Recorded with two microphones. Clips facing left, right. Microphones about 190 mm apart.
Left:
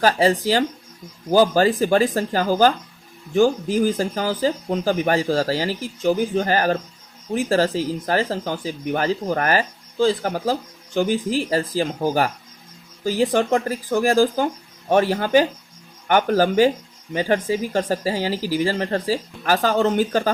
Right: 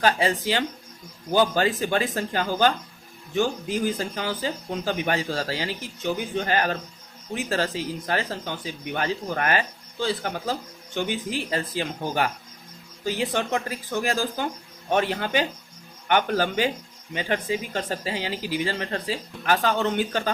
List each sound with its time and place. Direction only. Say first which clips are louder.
0.0 s speech: left 5 dB; 40° left (ahead or behind)